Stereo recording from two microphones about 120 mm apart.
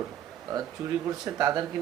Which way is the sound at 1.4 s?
30° right (ahead or behind).